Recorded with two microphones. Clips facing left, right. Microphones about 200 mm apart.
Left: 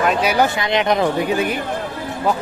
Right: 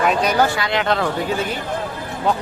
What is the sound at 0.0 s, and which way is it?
Speech, 5° left (ahead or behind).